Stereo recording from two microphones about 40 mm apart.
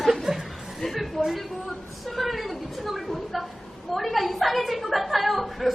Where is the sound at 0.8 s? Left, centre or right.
Centre.